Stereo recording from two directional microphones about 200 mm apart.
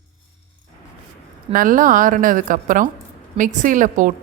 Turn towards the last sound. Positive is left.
turn(degrees=-40)  # may be behind; listen again after turning